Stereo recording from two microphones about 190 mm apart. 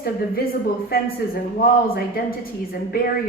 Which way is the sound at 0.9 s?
55° left (ahead or behind).